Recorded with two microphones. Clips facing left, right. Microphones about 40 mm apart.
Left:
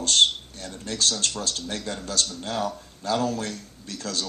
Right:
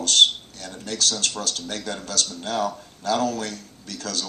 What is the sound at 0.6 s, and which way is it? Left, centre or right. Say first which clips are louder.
Speech: right 1 dB; right.